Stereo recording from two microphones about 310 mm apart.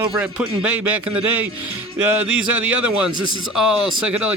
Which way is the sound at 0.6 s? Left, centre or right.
Right.